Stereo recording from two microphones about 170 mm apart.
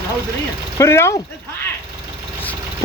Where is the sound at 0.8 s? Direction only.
15° left (ahead or behind).